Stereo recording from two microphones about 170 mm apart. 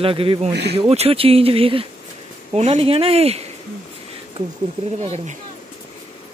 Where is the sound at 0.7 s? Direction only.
35° right (ahead or behind).